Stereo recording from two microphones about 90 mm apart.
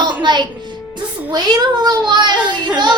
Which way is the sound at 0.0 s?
55° right (ahead or behind).